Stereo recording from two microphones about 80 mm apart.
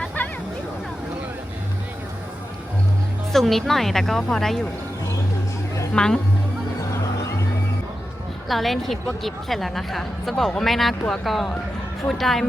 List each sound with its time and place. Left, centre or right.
3.3 s speech: centre
5.9 s speech: centre
8.4 s speech: centre